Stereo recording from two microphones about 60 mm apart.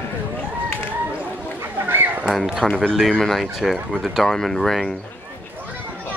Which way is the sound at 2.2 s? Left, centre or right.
Centre.